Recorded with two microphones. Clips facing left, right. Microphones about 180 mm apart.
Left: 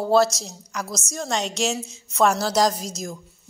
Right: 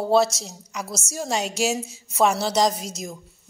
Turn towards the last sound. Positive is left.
turn(degrees=-5)  # may be behind; listen again after turning